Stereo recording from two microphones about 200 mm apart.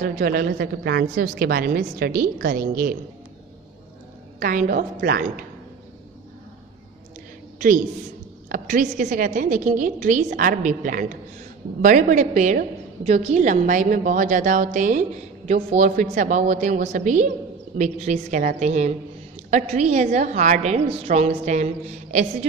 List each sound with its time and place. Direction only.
0.0 s a woman's voice: 45° right (ahead or behind)
4.4 s a woman's voice: 40° right (ahead or behind)
7.5 s a woman's voice: 40° right (ahead or behind)